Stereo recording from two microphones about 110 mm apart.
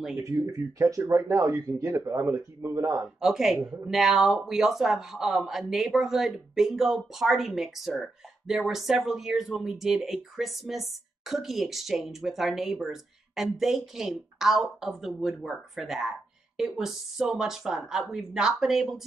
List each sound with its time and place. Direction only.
0.2 s speech: 35° right (ahead or behind)
3.2 s speech: 5° right (ahead or behind)